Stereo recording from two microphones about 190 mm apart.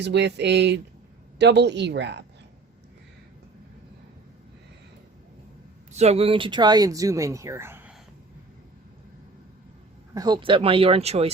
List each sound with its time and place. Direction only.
0.0 s speech: 65° right (ahead or behind)
5.9 s speech: 35° right (ahead or behind); by 7.9 s 10° right (ahead or behind)
10.2 s speech: 20° right (ahead or behind)